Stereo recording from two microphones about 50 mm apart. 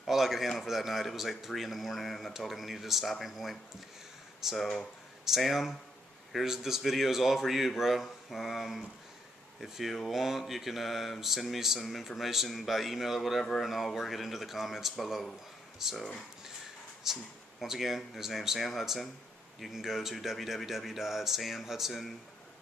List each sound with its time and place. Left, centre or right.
0.0 s speech: centre